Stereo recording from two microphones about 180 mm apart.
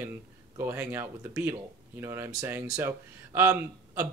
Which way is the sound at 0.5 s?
15° right (ahead or behind).